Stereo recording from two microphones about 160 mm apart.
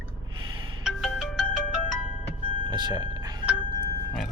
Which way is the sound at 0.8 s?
Centre (ahead or behind).